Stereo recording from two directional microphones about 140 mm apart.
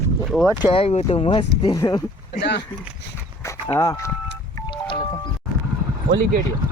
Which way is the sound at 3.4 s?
20° left (ahead or behind).